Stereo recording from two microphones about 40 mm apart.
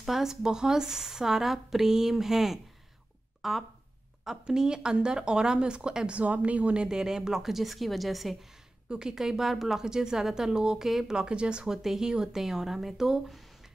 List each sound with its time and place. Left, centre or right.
0.0 s a woman's voice: centre
4.5 s speech: centre
6.2 s a woman's voice: right; by 8.5 s centre
8.8 s a woman's voice: right
10.9 s a woman's voice: centre
11.1 s speech: right
11.6 s a woman's voice: centre